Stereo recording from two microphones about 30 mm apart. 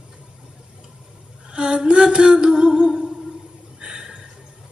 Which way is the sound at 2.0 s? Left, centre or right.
Right.